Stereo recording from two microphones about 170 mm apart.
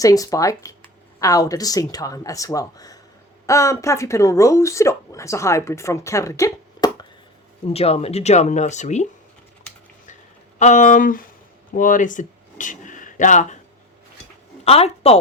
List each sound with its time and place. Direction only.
0.0 s speech: 20° left (ahead or behind)
7.7 s speech: 35° left (ahead or behind)
10.6 s speech: 45° left (ahead or behind)
14.6 s speech: 35° left (ahead or behind)